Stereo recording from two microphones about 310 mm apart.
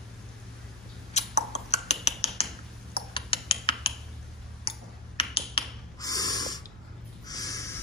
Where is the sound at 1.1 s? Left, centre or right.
Left.